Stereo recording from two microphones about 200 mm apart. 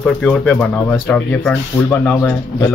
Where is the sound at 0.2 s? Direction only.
5° left (ahead or behind).